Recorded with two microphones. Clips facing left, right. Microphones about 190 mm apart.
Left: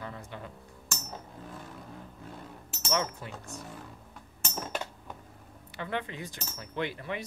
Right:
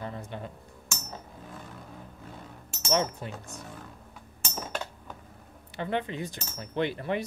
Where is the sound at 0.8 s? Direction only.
Centre (ahead or behind).